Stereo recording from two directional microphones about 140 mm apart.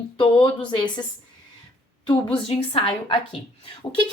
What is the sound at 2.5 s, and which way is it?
Speech, 40° left (ahead or behind).